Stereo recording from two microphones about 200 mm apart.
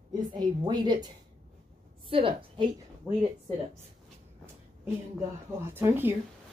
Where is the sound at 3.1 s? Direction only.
10° right (ahead or behind).